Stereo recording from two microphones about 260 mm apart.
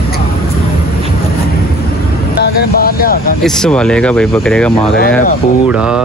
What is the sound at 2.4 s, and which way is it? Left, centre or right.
Vehicle, left.